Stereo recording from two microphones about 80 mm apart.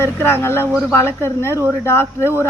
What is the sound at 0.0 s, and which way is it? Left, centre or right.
A woman's voice, left.